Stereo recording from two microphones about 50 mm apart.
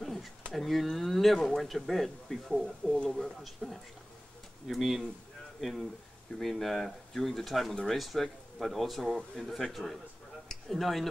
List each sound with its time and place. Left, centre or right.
0.0 s a sound: centre
0.5 s speech: centre
3.1 s speech: centre